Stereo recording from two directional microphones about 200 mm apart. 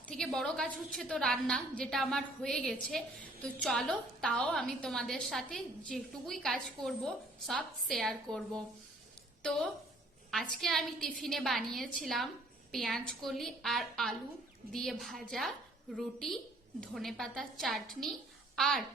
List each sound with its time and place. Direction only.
0.1 s a woman's voice: 5° left (ahead or behind)